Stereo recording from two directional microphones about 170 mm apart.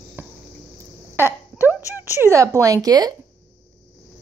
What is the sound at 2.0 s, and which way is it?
Speech, 15° right (ahead or behind).